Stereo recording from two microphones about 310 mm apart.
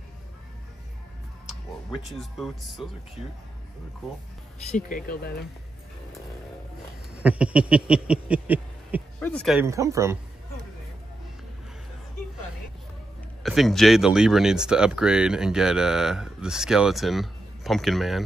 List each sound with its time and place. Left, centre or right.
2.0 s speech: centre
4.6 s speech: left
7.2 s a sound: centre
9.2 s speech: centre
13.4 s speech: centre